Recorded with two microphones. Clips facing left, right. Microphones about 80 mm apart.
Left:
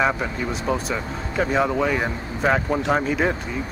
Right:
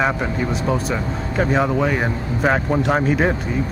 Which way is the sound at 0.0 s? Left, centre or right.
Centre.